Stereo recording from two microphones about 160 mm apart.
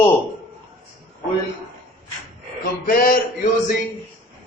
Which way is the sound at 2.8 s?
60° left (ahead or behind).